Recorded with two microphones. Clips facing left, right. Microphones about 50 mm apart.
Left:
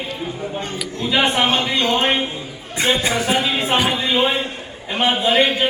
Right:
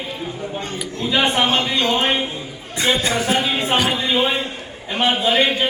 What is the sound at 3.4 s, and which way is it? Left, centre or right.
A man's voice, centre.